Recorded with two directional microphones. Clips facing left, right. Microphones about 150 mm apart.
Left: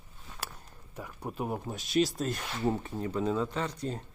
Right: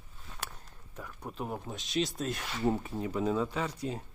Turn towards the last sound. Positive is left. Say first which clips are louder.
# left 1 dB
turn(degrees=-5)  # may be behind; listen again after turning